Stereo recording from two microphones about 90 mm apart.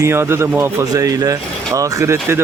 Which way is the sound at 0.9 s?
40° right (ahead or behind).